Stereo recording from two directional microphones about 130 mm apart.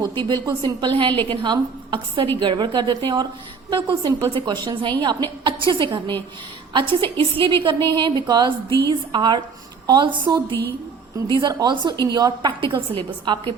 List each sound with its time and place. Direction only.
0.0 s a woman's voice: 35° right (ahead or behind)